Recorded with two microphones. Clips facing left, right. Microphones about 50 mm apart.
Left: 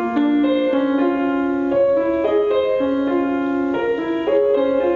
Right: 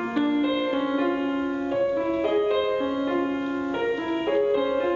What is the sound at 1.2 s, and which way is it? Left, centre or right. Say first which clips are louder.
Music: left 7 dB; centre.